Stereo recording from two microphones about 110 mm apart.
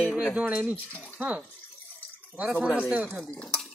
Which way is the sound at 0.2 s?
10° right (ahead or behind).